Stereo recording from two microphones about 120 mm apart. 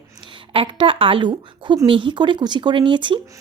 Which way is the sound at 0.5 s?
50° right (ahead or behind).